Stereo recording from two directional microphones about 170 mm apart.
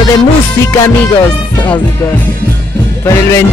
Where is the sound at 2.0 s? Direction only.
10° left (ahead or behind).